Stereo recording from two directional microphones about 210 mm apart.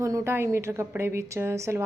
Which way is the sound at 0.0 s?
15° right (ahead or behind).